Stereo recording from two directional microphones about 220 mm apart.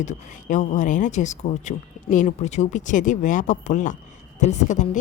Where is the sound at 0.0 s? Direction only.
35° left (ahead or behind).